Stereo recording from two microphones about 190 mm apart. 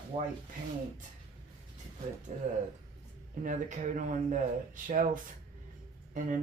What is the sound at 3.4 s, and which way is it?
Speech, 40° right (ahead or behind).